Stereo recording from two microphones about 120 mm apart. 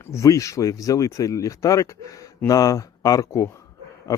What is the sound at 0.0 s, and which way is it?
A man's voice, 25° left (ahead or behind).